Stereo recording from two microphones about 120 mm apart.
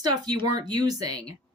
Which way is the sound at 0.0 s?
35° right (ahead or behind).